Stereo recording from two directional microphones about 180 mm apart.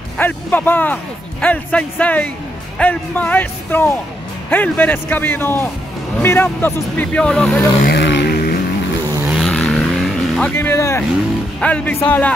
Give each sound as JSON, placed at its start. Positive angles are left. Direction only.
{"t": 0.2, "sound": "speech", "side_deg": 10}
{"t": 7.8, "sound": "vehicle", "side_deg": 70}
{"t": 9.3, "sound": "vehicle", "side_deg": 0}
{"t": 10.5, "sound": "speech", "side_deg": 15}